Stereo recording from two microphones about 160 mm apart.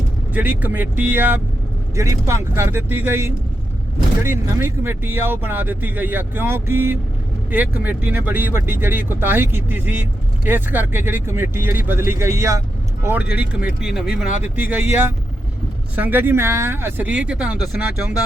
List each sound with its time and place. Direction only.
0.3 s speech: 10° right (ahead or behind)
16.0 s speech: 10° right (ahead or behind)